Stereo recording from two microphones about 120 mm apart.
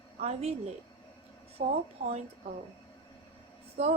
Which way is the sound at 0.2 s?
60° right (ahead or behind).